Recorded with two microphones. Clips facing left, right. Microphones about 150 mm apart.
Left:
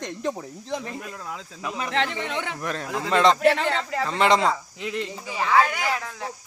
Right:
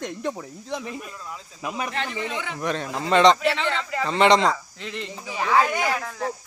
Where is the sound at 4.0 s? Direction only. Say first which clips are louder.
Right 3 dB; centre (ahead or behind).